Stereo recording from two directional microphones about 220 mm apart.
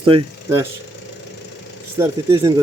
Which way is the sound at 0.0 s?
20° right (ahead or behind).